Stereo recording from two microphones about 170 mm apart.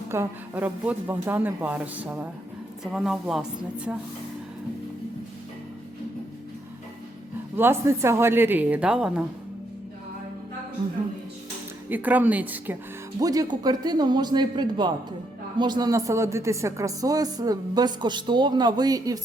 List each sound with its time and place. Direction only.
0.1 s a woman's voice: 15° right (ahead or behind)
7.5 s speech: 15° right (ahead or behind)
11.9 s speech: 10° right (ahead or behind)
13.1 s speech: 20° right (ahead or behind)